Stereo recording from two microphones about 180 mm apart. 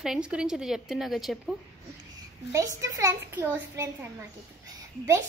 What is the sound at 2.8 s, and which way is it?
A child's voice, 15° right (ahead or behind).